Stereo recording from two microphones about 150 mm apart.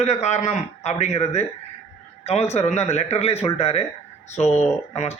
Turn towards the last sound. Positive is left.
turn(degrees=45)  # may be behind; listen again after turning